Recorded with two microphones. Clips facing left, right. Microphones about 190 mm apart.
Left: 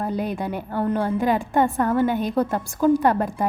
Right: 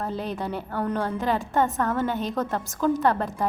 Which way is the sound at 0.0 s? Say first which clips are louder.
Left 4 dB; 15° left (ahead or behind).